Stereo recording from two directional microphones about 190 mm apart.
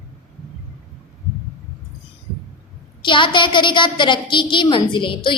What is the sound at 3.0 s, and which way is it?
A woman's voice, 25° left (ahead or behind).